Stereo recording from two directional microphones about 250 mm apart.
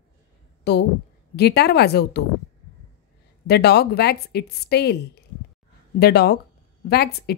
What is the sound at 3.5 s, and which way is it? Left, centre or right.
A woman's voice, left.